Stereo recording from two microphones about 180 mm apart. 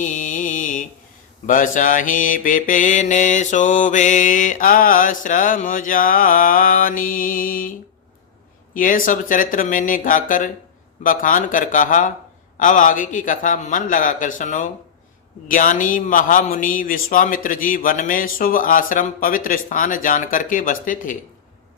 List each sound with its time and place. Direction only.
0.0 s mantra: 45° left (ahead or behind)